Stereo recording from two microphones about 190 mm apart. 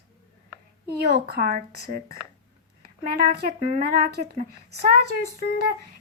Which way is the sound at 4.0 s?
60° right (ahead or behind).